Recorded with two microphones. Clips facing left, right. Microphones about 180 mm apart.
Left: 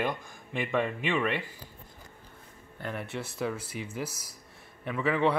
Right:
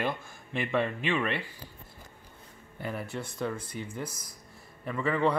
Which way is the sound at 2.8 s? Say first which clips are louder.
Even; centre (ahead or behind).